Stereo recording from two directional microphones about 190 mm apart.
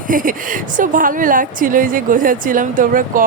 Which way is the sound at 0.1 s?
45° right (ahead or behind).